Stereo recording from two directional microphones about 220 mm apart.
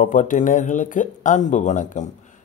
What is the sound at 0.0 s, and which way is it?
Speech, 35° left (ahead or behind).